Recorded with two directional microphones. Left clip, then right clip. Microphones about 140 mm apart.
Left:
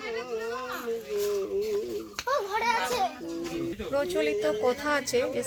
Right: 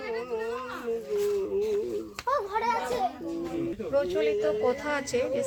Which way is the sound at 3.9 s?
55° left (ahead or behind).